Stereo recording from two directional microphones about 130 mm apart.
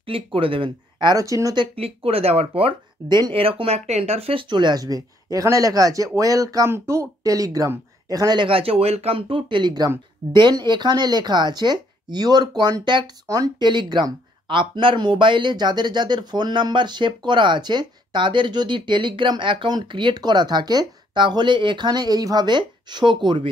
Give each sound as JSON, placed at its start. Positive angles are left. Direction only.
{"t": 0.0, "sound": "speech", "side_deg": -45}
{"t": 1.8, "sound": "speech", "side_deg": -50}
{"t": 3.1, "sound": "speech", "side_deg": -35}